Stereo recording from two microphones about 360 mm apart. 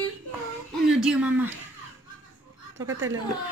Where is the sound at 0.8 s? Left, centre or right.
Centre.